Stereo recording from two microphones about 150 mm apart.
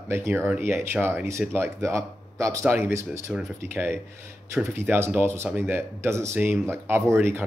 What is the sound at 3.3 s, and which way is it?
Speech, 5° right (ahead or behind).